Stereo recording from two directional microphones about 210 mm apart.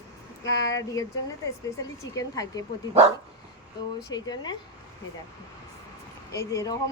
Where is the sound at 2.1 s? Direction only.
15° left (ahead or behind).